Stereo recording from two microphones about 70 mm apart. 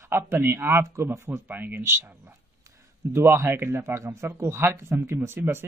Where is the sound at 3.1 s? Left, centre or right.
Right.